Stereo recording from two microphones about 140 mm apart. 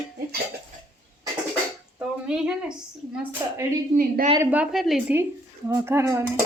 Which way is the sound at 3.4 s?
25° right (ahead or behind).